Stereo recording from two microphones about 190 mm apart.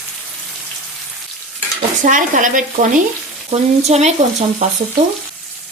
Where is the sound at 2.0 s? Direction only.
45° right (ahead or behind).